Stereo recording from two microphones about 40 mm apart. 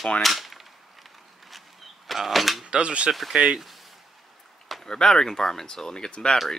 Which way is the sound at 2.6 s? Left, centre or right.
Right.